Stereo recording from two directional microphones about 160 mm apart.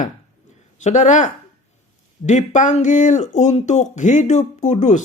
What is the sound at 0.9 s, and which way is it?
Speech, 50° left (ahead or behind).